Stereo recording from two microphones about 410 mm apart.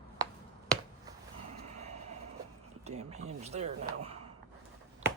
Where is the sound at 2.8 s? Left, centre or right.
Centre.